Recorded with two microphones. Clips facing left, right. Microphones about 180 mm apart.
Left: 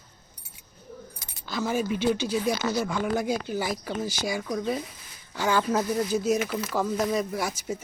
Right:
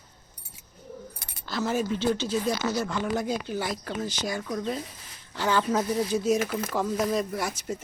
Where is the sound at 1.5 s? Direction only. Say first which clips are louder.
Even; centre (ahead or behind).